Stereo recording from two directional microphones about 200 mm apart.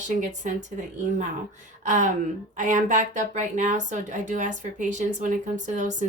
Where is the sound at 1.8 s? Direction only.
40° right (ahead or behind).